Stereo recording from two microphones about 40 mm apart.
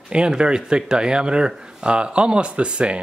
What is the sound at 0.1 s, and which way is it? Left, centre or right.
Speech, right.